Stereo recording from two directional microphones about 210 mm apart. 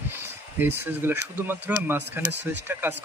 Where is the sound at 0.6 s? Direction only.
10° right (ahead or behind).